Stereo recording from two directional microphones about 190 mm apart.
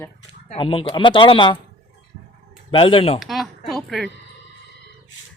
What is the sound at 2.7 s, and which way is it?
Speech, 30° left (ahead or behind).